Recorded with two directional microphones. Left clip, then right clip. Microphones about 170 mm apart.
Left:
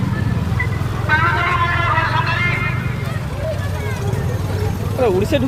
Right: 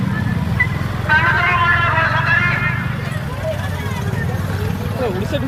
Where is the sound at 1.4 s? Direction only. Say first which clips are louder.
Right 3 dB; 15° left (ahead or behind).